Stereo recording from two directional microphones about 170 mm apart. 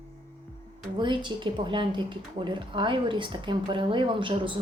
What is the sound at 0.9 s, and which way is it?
A woman's voice, 30° right (ahead or behind).